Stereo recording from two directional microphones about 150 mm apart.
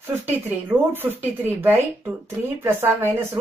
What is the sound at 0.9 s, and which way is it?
Speech, 15° right (ahead or behind).